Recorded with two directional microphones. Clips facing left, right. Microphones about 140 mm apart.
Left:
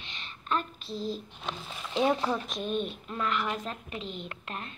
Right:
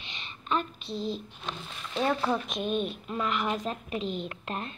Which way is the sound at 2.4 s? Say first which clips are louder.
Right 3 dB; centre (ahead or behind).